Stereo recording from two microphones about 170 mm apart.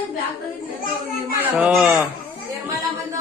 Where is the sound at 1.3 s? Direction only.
10° right (ahead or behind).